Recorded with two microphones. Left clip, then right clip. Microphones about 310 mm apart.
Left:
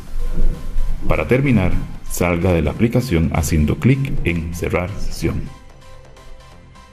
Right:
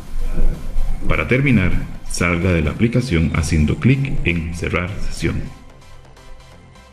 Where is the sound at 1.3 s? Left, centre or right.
Centre.